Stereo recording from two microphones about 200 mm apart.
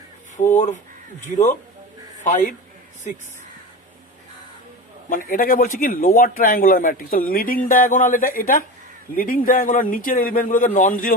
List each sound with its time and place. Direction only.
0.5 s speech: 40° left (ahead or behind)
5.0 s a man's voice: 45° left (ahead or behind)